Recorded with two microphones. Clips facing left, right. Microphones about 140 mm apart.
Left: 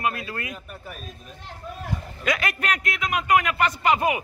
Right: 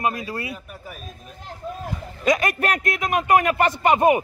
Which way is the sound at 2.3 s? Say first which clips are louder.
Right 5 dB; 45° right (ahead or behind).